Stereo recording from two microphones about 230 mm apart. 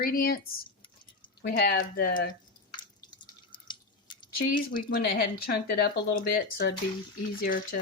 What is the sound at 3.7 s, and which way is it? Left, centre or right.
Drip, centre.